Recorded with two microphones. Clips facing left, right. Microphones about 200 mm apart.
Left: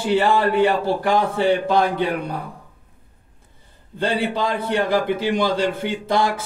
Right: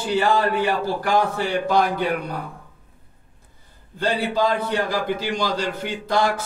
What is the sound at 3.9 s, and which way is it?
A man's voice, 25° left (ahead or behind).